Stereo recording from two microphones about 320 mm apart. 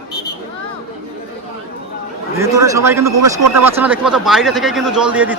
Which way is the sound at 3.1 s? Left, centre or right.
Right.